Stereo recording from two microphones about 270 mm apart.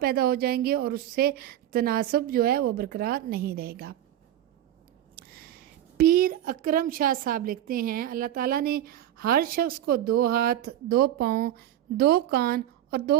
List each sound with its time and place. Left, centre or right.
0.0 s a woman's voice: right
5.1 s a woman's voice: right